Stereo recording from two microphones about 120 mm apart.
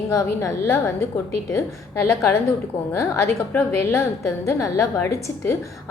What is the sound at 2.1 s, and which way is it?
A woman's voice, 25° left (ahead or behind).